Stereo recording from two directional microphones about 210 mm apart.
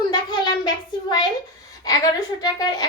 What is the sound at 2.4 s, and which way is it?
Speech, 15° left (ahead or behind).